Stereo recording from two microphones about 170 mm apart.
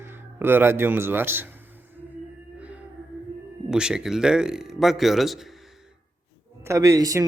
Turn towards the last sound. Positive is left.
turn(degrees=-20)  # may be behind; listen again after turning